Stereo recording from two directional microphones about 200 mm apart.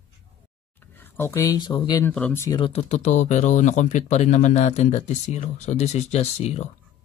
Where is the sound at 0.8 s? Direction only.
10° left (ahead or behind).